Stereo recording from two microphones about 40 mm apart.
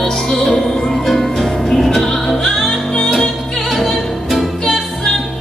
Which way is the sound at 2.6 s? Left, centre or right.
Centre.